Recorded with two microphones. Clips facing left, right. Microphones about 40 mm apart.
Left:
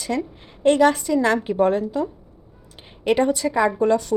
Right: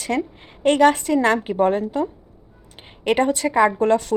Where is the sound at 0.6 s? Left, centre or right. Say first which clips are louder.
Right 1 dB; right.